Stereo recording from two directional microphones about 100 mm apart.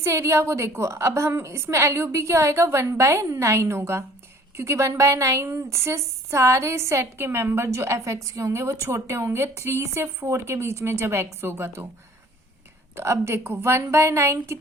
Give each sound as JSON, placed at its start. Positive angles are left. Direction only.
{"t": 0.0, "sound": "speech", "side_deg": -30}
{"t": 13.0, "sound": "speech", "side_deg": -25}